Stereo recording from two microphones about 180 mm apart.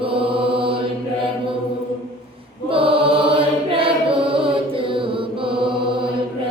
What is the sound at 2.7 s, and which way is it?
Choir, 30° right (ahead or behind).